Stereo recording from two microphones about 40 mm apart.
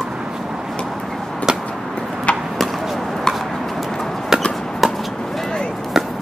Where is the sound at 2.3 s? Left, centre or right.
Left.